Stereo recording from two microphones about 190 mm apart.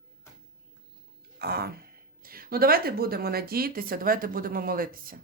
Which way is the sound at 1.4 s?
55° right (ahead or behind).